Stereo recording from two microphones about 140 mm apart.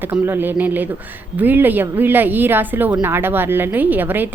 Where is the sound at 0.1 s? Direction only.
15° right (ahead or behind).